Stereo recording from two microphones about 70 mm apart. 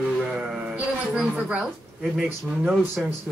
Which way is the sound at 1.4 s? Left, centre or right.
Centre.